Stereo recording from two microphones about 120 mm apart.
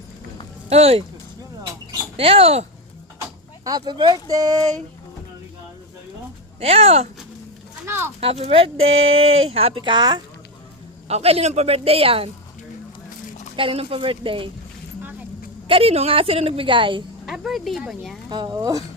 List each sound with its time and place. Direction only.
0.7 s speech: 60° right (ahead or behind)
2.1 s speech: 50° right (ahead or behind)
3.6 s speech: 35° right (ahead or behind)
6.6 s speech: 55° right (ahead or behind)
7.9 s speech: 20° right (ahead or behind)
8.2 s speech: 55° right (ahead or behind); by 10.2 s 35° right (ahead or behind)
11.1 s speech: 55° right (ahead or behind)
13.6 s a woman's voice: 45° right (ahead or behind)
15.6 s a woman's voice: 50° right (ahead or behind)
17.2 s speech: 5° right (ahead or behind)
18.3 s speech: 40° right (ahead or behind)